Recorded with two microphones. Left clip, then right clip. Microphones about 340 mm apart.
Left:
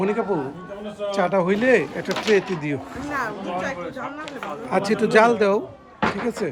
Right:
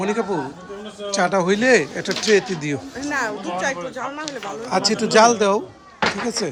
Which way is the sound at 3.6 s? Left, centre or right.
Right.